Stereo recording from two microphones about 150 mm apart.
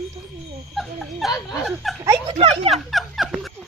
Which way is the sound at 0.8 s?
Centre (ahead or behind).